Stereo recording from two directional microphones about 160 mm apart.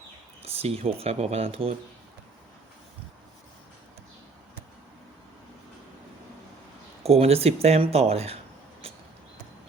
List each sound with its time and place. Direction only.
0.4 s speech: 40° right (ahead or behind)
7.0 s speech: 40° right (ahead or behind)
8.8 s a sound: 40° right (ahead or behind)